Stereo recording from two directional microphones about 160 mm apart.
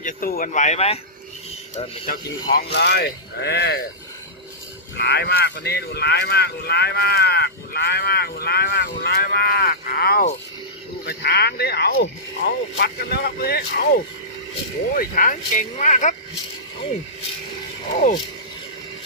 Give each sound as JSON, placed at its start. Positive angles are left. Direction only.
{"t": 0.0, "sound": "speech", "side_deg": 60}
{"t": 2.0, "sound": "speech", "side_deg": 85}
{"t": 4.9, "sound": "speech", "side_deg": 90}
{"t": 11.1, "sound": "speech", "side_deg": 85}
{"t": 15.0, "sound": "speech", "side_deg": 60}